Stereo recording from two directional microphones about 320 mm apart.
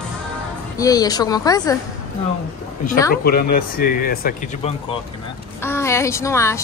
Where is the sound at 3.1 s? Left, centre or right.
Left.